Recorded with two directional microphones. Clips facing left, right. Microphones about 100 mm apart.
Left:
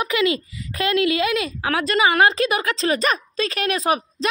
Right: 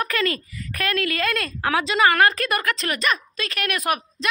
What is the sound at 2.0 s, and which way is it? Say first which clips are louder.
A woman's voice: left 2 dB; 20° left (ahead or behind).